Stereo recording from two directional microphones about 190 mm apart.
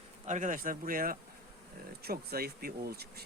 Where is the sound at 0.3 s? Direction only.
40° right (ahead or behind).